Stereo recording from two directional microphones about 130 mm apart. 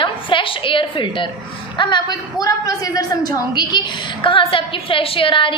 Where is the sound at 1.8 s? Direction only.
35° left (ahead or behind).